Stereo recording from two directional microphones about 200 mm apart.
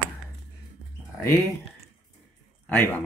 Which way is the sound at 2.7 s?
10° left (ahead or behind).